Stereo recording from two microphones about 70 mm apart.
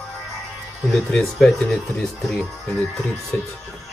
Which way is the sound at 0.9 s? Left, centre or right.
Centre.